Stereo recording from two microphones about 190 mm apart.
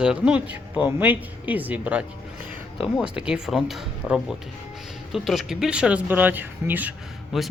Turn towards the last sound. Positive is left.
turn(degrees=-5)  # may be behind; listen again after turning